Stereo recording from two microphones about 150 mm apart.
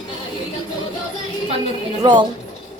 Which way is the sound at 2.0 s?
30° right (ahead or behind).